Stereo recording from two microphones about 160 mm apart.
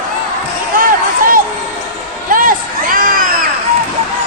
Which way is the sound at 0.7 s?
60° right (ahead or behind).